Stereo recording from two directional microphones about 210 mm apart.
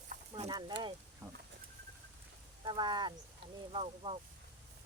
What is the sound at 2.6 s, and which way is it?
Speech, 20° right (ahead or behind).